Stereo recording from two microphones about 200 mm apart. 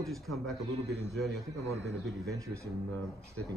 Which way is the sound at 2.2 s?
15° right (ahead or behind).